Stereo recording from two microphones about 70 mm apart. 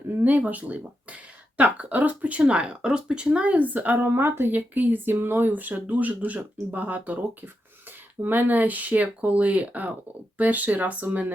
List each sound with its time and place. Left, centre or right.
0.2 s speech: right